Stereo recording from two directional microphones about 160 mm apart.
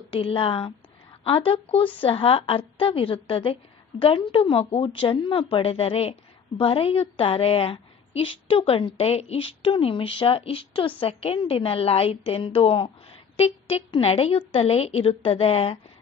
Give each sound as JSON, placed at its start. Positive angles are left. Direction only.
{"t": 0.1, "sound": "a woman's voice", "side_deg": 35}